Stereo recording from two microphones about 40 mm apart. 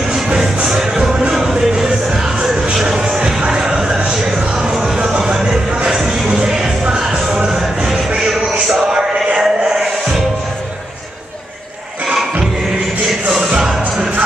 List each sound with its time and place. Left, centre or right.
0.1 s music: centre
2.8 s vehicle: centre
4.4 s music: centre
13.6 s music: centre